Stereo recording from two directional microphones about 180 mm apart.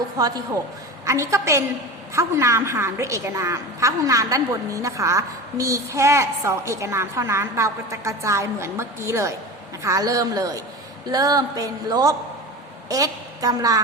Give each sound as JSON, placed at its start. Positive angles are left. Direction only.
{"t": 0.2, "sound": "a woman's voice", "side_deg": -20}